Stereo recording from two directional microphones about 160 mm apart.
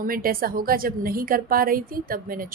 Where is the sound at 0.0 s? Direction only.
65° right (ahead or behind).